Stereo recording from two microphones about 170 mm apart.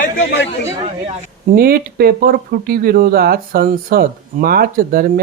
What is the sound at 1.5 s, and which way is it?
Speech, 60° right (ahead or behind).